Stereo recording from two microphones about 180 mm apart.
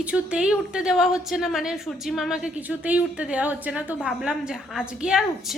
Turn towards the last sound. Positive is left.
turn(degrees=-5)  # may be behind; listen again after turning